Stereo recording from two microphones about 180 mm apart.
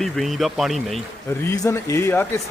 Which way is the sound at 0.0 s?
Centre (ahead or behind).